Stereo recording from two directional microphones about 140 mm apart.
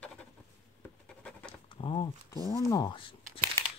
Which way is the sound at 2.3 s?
25° left (ahead or behind).